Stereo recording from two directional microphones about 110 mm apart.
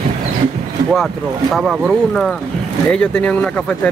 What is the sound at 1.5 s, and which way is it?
Speech, 5° right (ahead or behind).